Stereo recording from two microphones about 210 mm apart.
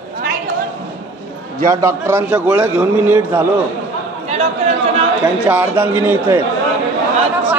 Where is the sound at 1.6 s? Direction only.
15° right (ahead or behind).